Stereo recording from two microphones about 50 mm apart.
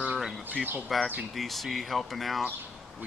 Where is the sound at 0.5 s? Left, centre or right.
Right.